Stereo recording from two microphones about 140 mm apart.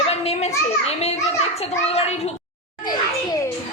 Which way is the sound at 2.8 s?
30° left (ahead or behind).